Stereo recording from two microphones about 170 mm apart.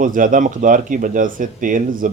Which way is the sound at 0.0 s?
50° right (ahead or behind).